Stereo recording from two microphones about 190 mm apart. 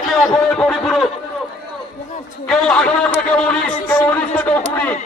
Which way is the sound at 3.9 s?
10° left (ahead or behind).